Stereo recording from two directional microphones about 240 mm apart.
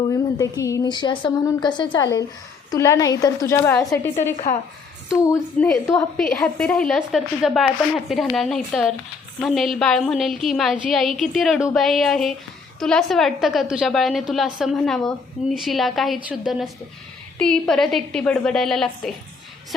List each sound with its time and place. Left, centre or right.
0.1 s a woman's voice: centre